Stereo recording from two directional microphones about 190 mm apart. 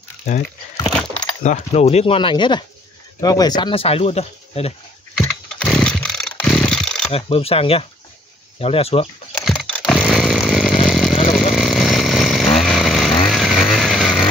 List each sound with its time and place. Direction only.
0.9 s keys jangling: 5° left (ahead or behind)
1.4 s speech: 35° left (ahead or behind)
5.1 s chainsaw: 5° left (ahead or behind)
7.1 s speech: 30° left (ahead or behind)
9.3 s chainsaw: centre (ahead or behind)
13.3 s vehicle: centre (ahead or behind)